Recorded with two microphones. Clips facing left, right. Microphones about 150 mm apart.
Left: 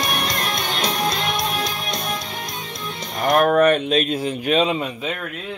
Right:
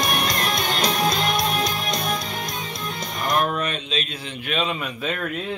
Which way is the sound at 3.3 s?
60° left (ahead or behind).